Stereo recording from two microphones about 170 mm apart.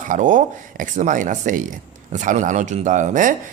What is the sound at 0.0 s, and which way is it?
Speech, 50° right (ahead or behind).